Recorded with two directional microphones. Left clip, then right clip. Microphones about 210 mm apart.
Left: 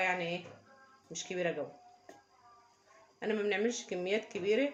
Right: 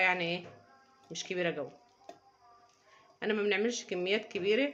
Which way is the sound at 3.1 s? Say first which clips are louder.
Right 2 dB; 15° right (ahead or behind).